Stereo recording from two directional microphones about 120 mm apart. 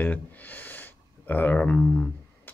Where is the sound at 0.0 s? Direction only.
15° left (ahead or behind).